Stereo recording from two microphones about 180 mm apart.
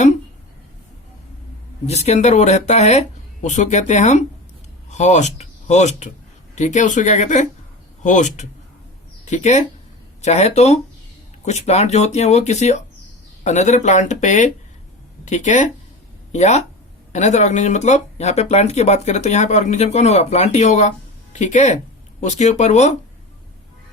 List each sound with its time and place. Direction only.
1.9 s speech: 35° left (ahead or behind)